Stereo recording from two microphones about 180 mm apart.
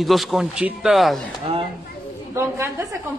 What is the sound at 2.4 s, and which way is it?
Speech, 15° right (ahead or behind).